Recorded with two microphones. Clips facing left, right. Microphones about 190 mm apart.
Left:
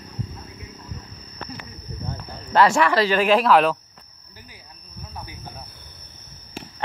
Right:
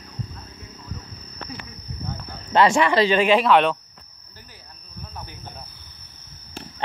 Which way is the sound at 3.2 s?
Centre (ahead or behind).